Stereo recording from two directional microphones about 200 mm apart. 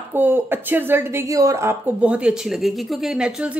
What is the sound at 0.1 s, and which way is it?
A woman's voice, 10° right (ahead or behind).